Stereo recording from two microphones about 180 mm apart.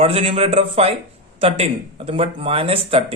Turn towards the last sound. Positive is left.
turn(degrees=-30)  # may be behind; listen again after turning